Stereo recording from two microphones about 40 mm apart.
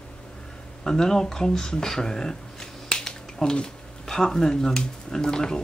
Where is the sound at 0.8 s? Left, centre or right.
Centre.